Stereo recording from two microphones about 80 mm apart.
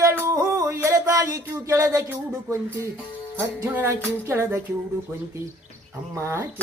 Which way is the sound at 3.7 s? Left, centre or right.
Right.